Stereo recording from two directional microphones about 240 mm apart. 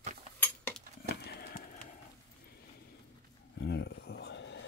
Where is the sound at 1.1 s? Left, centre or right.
Left.